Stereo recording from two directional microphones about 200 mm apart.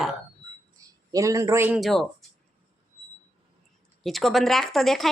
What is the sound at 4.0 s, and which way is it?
A man's voice, centre (ahead or behind).